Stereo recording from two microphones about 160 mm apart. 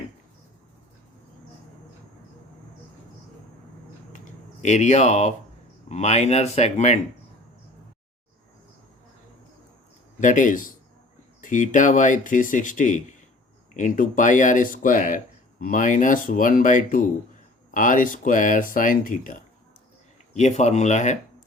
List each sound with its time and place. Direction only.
4.6 s speech: 45° left (ahead or behind)
10.2 s speech: 55° left (ahead or behind)
20.3 s speech: 45° left (ahead or behind)